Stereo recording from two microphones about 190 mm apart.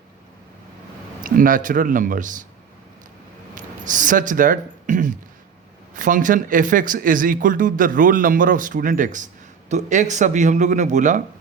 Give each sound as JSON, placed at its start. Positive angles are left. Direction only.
{"t": 1.2, "sound": "a man's voice", "side_deg": -45}
{"t": 3.5, "sound": "a sound", "side_deg": -45}
{"t": 5.9, "sound": "a man's voice", "side_deg": -45}